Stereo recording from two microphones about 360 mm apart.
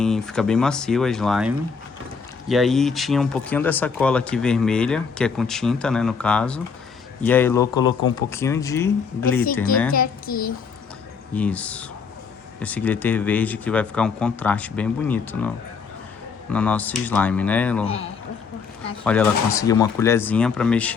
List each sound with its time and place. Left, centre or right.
0.0 s speech: centre
9.9 s a child's voice: left
11.3 s speech: centre
19.0 s speech: centre